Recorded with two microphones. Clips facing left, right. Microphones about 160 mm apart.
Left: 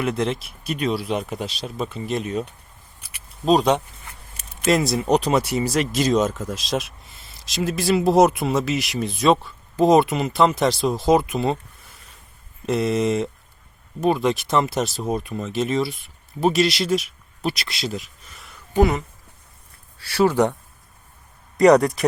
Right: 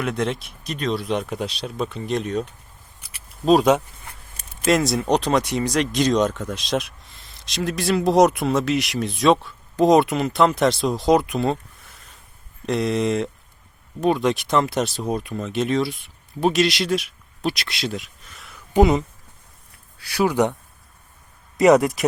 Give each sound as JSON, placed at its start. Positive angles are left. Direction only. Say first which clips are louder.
{"t": 0.0, "sound": "speech", "louder": "left 1 dB", "side_deg": 0}
{"t": 12.6, "sound": "speech", "louder": "left 1 dB", "side_deg": 0}
{"t": 18.7, "sound": "speech", "louder": "right 2 dB", "side_deg": -20}
{"t": 20.1, "sound": "speech", "louder": "left 2 dB", "side_deg": -15}
{"t": 21.7, "sound": "speech", "louder": "even", "side_deg": -5}